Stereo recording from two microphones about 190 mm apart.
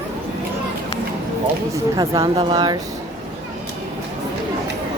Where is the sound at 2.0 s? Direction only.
20° right (ahead or behind).